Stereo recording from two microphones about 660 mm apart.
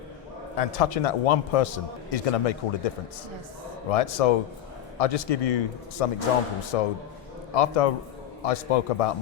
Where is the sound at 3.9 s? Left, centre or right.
Left.